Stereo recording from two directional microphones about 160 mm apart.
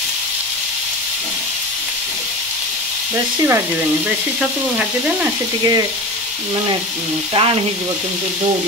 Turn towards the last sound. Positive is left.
turn(degrees=-30)  # may be behind; listen again after turning